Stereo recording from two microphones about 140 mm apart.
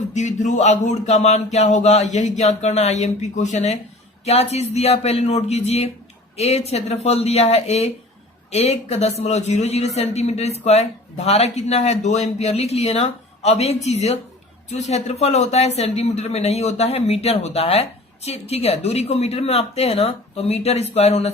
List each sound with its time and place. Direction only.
0.1 s speech: 60° left (ahead or behind)